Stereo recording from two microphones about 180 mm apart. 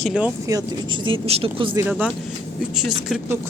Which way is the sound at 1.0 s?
30° right (ahead or behind).